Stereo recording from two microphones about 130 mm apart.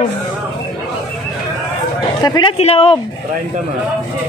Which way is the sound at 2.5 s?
50° left (ahead or behind).